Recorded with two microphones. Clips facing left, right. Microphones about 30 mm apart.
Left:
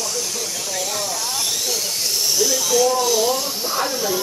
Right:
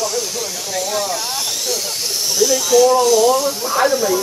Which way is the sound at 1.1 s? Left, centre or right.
Centre.